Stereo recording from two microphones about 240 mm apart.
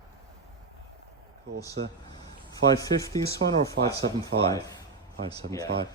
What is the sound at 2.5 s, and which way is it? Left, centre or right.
A man's voice, centre.